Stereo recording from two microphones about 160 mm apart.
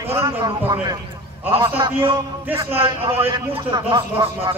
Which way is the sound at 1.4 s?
15° right (ahead or behind).